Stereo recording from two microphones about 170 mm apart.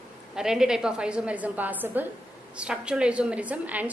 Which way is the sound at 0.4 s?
5° right (ahead or behind).